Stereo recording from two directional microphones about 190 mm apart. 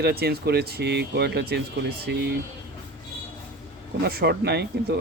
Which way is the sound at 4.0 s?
55° right (ahead or behind).